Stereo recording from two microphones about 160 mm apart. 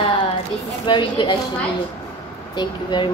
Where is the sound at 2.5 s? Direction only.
30° left (ahead or behind).